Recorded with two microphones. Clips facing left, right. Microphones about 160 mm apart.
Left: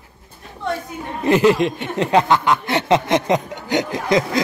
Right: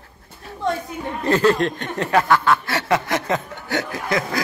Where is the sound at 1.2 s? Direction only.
15° left (ahead or behind).